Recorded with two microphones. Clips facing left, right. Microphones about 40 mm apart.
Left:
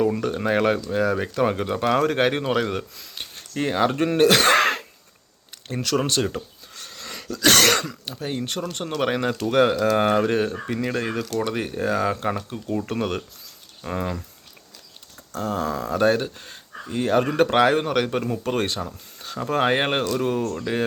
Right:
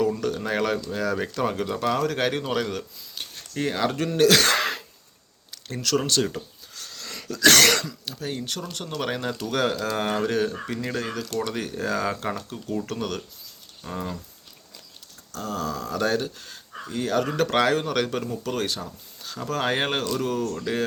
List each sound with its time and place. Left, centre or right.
0.3 s speech: left
3.2 s a sound: left
3.5 s speech: left
4.5 s throat clearing: left
5.5 s speech: left
6.7 s a sound: left
7.7 s speech: left
8.0 s speech: left
11.0 s speech: left
11.4 s speech: left
15.3 s speech: left
18.2 s speech: left; by 20.8 s centre